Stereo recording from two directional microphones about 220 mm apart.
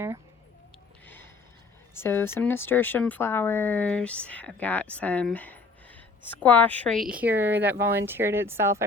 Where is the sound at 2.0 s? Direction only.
10° left (ahead or behind).